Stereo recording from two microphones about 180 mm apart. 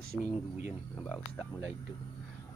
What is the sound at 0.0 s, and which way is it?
Speech, 55° right (ahead or behind).